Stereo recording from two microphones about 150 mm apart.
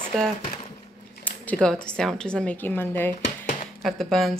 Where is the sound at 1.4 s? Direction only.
5° left (ahead or behind).